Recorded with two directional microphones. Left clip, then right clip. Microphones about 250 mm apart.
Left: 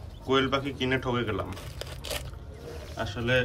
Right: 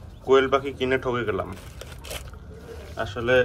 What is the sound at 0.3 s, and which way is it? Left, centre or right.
Speech, centre.